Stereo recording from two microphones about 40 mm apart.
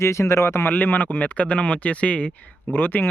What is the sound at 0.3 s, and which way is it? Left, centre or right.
Speech, left.